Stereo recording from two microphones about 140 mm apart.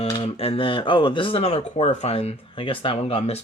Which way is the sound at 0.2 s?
45° left (ahead or behind).